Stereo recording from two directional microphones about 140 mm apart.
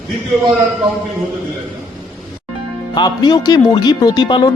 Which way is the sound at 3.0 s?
30° left (ahead or behind).